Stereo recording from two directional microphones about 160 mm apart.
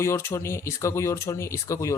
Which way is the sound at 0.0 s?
15° left (ahead or behind).